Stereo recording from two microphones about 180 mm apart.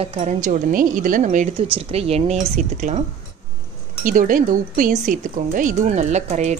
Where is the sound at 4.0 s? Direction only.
50° right (ahead or behind).